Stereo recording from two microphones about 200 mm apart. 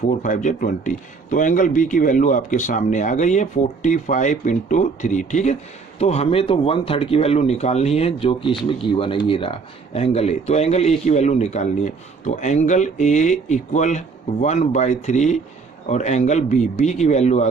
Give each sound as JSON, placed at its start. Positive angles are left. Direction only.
{"t": 0.1, "sound": "speech", "side_deg": 40}